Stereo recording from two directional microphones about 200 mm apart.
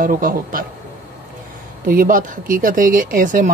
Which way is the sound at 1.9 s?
45° right (ahead or behind).